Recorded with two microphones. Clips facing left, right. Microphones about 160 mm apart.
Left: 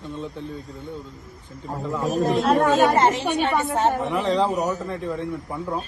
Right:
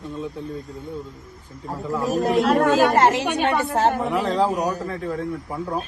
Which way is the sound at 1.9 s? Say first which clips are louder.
Right 2 dB; centre (ahead or behind).